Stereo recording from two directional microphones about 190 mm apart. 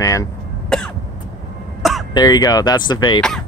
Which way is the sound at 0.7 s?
5° left (ahead or behind).